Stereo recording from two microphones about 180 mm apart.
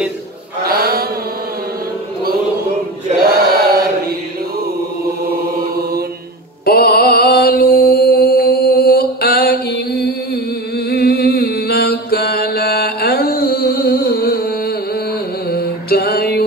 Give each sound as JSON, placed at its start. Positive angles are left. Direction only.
{"t": 0.7, "sound": "mantra", "side_deg": -60}
{"t": 3.3, "sound": "chant", "side_deg": -55}
{"t": 6.6, "sound": "mantra", "side_deg": 60}
{"t": 15.5, "sound": "mantra", "side_deg": 60}